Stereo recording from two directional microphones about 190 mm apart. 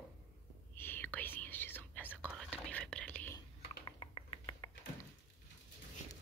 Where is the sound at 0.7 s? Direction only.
10° left (ahead or behind).